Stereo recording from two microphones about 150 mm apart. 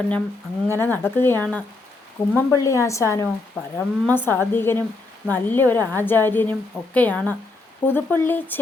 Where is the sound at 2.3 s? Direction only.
20° left (ahead or behind).